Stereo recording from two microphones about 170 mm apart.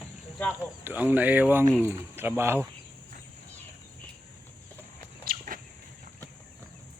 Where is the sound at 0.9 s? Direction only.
10° right (ahead or behind).